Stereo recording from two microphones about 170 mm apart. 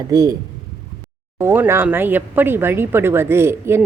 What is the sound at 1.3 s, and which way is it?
Speech, 15° right (ahead or behind).